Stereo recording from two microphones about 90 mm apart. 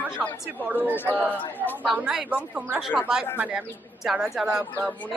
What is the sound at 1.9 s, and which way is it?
Speech, 10° right (ahead or behind).